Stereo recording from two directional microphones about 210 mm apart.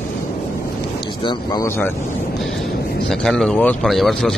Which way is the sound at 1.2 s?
20° left (ahead or behind).